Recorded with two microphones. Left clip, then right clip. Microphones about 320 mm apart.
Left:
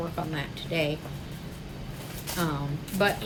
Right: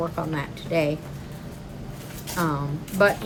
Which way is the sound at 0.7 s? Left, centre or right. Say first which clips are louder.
Right 5 dB; right.